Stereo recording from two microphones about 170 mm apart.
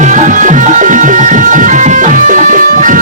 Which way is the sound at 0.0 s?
45° right (ahead or behind).